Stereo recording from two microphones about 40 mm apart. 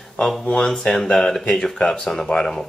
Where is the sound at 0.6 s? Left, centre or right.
Centre.